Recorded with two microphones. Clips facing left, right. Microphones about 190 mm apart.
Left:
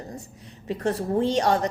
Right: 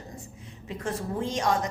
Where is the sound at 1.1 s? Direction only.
35° left (ahead or behind).